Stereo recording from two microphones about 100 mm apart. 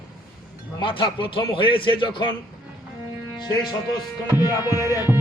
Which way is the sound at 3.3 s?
45° left (ahead or behind).